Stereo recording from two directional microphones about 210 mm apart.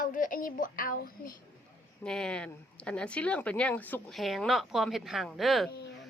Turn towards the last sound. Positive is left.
turn(degrees=0)  # may be behind; listen again after turning